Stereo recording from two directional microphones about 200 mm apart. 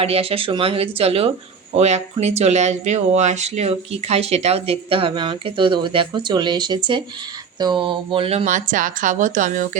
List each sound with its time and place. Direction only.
0.0 s speech: 30° right (ahead or behind)
8.4 s speech: 40° right (ahead or behind)